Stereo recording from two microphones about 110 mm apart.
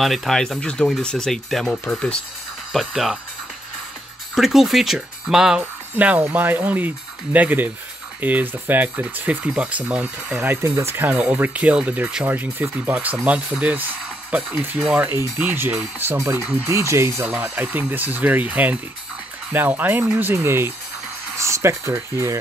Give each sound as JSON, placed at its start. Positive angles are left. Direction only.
{"t": 0.0, "sound": "speech", "side_deg": 0}
{"t": 4.4, "sound": "speech", "side_deg": 0}